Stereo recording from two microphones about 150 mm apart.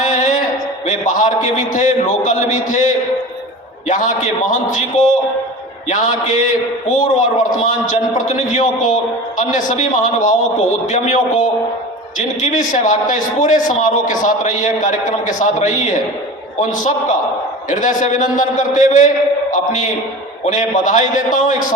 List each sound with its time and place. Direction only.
0.0 s a sound: 55° left (ahead or behind)
0.9 s a man's voice: 55° left (ahead or behind)
3.8 s a man's voice: 55° left (ahead or behind)
17.7 s a man's voice: 55° left (ahead or behind)